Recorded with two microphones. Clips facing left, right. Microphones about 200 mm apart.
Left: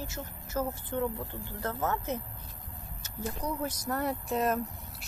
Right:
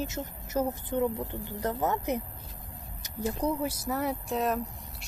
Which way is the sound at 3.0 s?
15° right (ahead or behind).